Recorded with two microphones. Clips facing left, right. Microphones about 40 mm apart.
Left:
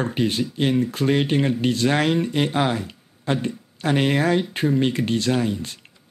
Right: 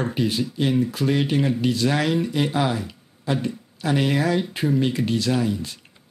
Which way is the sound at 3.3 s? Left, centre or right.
Left.